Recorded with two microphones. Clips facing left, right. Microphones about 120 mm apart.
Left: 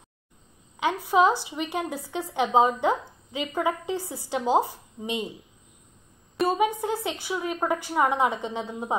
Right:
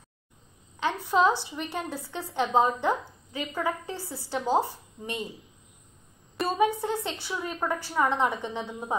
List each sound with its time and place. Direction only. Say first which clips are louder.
0.7 s speech: left 3 dB; 15° left (ahead or behind)
6.4 s speech: left 2 dB; 15° left (ahead or behind)